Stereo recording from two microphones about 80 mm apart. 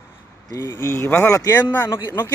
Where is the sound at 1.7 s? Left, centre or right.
Left.